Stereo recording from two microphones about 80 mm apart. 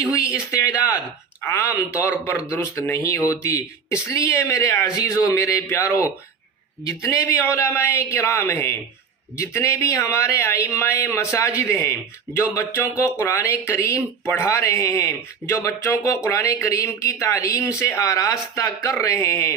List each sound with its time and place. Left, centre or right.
0.1 s speech: left
1.4 s speech: left